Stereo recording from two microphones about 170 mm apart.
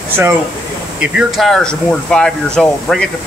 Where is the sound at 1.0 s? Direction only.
5° right (ahead or behind).